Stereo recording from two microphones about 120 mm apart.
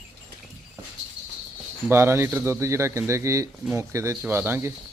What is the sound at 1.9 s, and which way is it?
Speech, 20° right (ahead or behind).